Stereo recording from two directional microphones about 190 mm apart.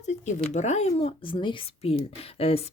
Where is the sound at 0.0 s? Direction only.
35° left (ahead or behind).